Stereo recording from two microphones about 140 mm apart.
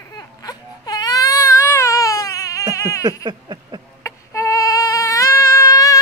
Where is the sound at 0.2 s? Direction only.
25° left (ahead or behind).